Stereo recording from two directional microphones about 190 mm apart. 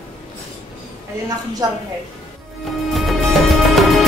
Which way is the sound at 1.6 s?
20° right (ahead or behind).